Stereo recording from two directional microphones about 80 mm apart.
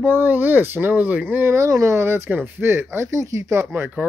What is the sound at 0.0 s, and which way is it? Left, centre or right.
Speech, right.